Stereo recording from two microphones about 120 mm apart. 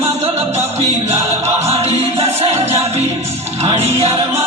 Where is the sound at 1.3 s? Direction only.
65° right (ahead or behind).